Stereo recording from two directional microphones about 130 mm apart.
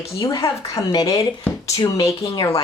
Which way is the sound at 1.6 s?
25° left (ahead or behind).